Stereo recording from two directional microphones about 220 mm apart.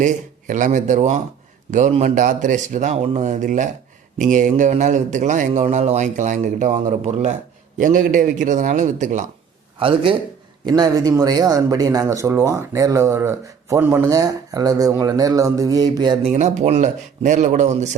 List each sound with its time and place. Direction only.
0.0 s a man's voice: 35° right (ahead or behind)
9.7 s a man's voice: 25° right (ahead or behind)
16.3 s a man's voice: 30° right (ahead or behind)